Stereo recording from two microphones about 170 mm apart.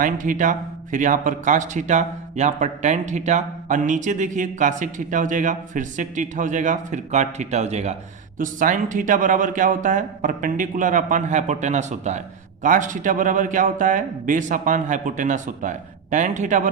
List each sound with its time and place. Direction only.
0.0 s speech: 50° right (ahead or behind)